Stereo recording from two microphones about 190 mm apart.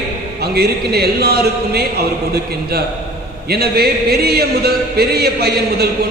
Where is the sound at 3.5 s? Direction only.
55° right (ahead or behind).